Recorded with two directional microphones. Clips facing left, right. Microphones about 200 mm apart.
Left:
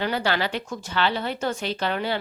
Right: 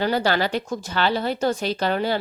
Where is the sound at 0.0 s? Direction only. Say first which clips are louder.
Right 4 dB; 40° right (ahead or behind).